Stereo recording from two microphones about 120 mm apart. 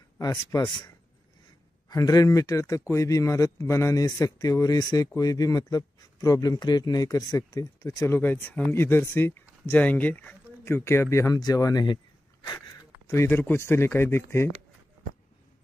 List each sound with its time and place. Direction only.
0.2 s speech: 30° left (ahead or behind)
1.9 s speech: 30° left (ahead or behind)
13.1 s speech: 20° left (ahead or behind)